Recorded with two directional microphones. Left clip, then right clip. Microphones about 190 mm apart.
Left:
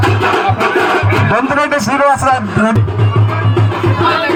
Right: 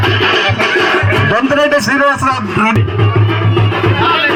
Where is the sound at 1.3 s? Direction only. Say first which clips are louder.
Right 2 dB; 65° left (ahead or behind).